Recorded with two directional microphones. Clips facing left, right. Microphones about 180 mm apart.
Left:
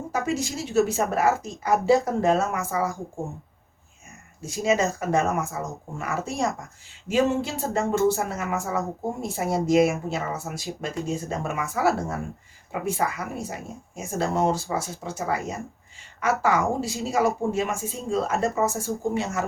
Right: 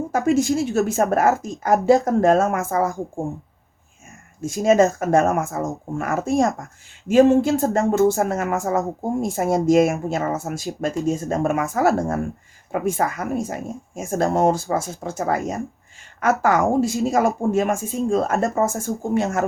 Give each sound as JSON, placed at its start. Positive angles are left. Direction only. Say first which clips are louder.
{"t": 0.1, "sound": "speech", "louder": "right 9 dB", "side_deg": -55}
{"t": 4.4, "sound": "speech", "louder": "right 7 dB", "side_deg": -50}